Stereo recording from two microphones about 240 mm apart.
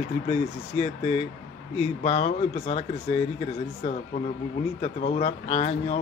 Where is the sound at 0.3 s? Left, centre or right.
Left.